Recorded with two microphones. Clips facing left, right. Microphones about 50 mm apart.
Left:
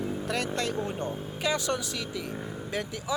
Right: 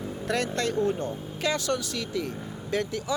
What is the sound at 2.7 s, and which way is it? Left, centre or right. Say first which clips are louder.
Speech: right 5 dB; centre.